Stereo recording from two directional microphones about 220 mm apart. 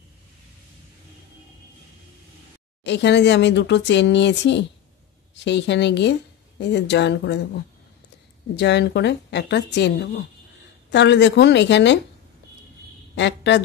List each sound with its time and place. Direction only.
2.8 s speech: 50° left (ahead or behind)
8.5 s speech: 50° left (ahead or behind)
13.1 s speech: 55° left (ahead or behind)